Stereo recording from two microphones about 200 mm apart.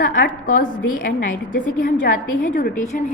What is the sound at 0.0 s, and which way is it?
Speech, 40° left (ahead or behind).